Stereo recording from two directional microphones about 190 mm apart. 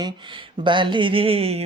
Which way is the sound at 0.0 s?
25° right (ahead or behind).